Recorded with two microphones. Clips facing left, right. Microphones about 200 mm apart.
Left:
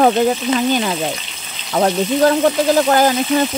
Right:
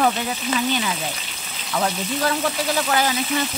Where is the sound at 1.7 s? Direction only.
45° left (ahead or behind).